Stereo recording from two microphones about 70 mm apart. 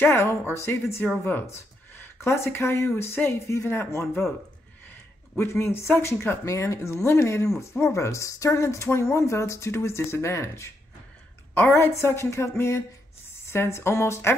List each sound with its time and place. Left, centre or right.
0.1 s speech: left
5.4 s speech: left
6.4 s speech: left